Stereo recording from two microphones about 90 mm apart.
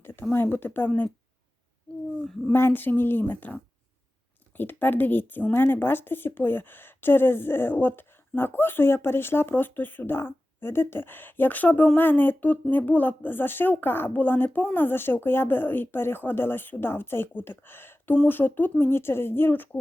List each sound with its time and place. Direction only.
0.0 s speech: 25° left (ahead or behind)
2.5 s speech: 25° left (ahead or behind)